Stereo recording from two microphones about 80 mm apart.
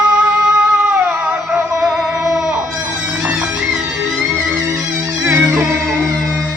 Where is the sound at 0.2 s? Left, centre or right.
Centre.